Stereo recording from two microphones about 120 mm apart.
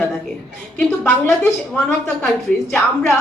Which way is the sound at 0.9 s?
20° left (ahead or behind).